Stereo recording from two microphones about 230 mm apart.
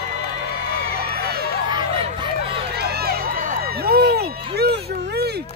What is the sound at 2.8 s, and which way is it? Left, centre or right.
Music, right.